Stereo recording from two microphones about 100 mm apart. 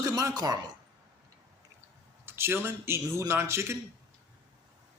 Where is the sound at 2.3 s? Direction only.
25° right (ahead or behind).